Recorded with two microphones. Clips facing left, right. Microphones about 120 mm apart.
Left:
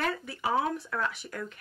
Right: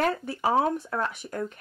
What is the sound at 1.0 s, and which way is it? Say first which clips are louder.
Speech: right 2 dB; 50° right (ahead or behind).